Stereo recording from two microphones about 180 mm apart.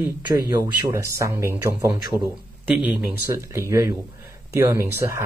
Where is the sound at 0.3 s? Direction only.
20° right (ahead or behind).